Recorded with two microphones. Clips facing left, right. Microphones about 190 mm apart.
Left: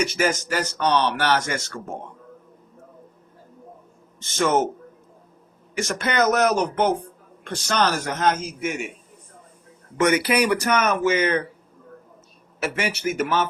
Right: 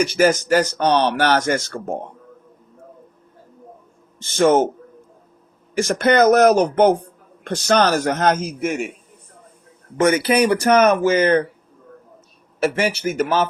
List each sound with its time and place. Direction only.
0.0 s speech: 35° right (ahead or behind)
4.2 s speech: 35° right (ahead or behind)
5.7 s speech: 35° right (ahead or behind); by 8.5 s 60° right (ahead or behind)
10.0 s speech: 30° right (ahead or behind)
12.6 s speech: 30° right (ahead or behind)